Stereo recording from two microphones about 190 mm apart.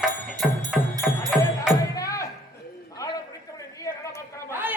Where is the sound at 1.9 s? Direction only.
15° left (ahead or behind).